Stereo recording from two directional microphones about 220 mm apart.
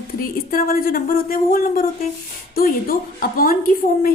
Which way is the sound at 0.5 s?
40° left (ahead or behind).